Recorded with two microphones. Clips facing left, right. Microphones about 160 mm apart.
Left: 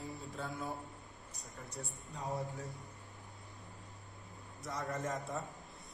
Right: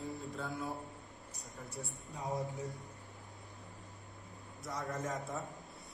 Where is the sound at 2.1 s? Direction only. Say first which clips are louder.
Right 2 dB; 15° right (ahead or behind).